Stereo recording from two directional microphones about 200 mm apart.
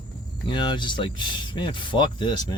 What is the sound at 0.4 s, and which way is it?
Speech, 25° left (ahead or behind).